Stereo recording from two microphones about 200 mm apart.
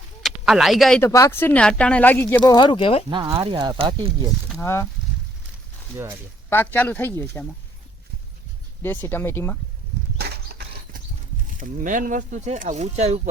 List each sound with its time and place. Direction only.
0.2 s speech: centre (ahead or behind)
1.0 s speech: 15° left (ahead or behind)
3.1 s speech: 25° right (ahead or behind)
4.5 s speech: 15° left (ahead or behind)
6.5 s speech: 10° left (ahead or behind)
8.8 s speech: 10° left (ahead or behind)
10.2 s a sound: 55° right (ahead or behind)
11.5 s speech: 40° right (ahead or behind)